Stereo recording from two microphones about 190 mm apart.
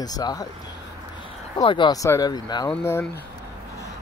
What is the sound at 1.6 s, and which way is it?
Speech, 25° left (ahead or behind).